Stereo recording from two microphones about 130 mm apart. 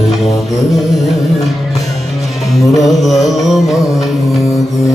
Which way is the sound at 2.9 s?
Centre (ahead or behind).